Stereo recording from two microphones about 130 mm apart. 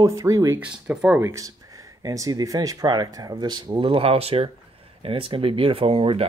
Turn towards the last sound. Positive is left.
turn(degrees=-45)  # may be behind; listen again after turning